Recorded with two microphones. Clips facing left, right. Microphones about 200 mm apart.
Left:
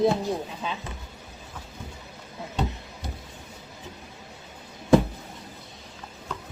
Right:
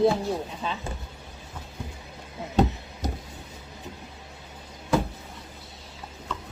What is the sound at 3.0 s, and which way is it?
Vehicle, 40° right (ahead or behind).